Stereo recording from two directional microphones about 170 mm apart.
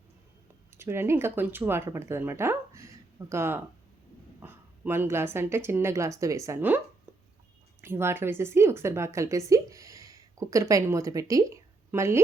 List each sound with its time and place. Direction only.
0.8 s a woman's voice: 15° right (ahead or behind)